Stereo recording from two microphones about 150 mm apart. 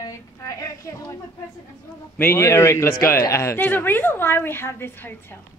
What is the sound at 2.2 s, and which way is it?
A woman's voice, 15° left (ahead or behind).